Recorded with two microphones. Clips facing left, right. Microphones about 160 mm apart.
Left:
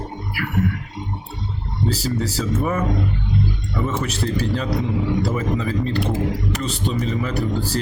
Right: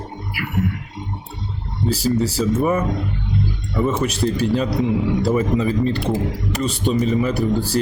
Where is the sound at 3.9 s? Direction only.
20° right (ahead or behind).